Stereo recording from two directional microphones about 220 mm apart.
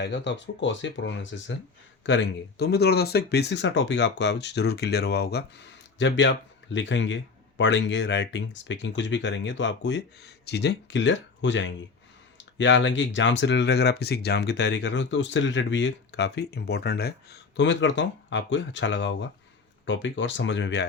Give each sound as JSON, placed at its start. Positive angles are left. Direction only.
{"t": 0.0, "sound": "speech", "side_deg": 50}